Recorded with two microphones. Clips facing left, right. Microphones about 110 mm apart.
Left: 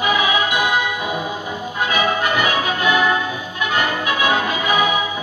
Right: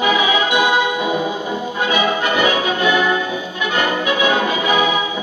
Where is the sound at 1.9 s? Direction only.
25° right (ahead or behind).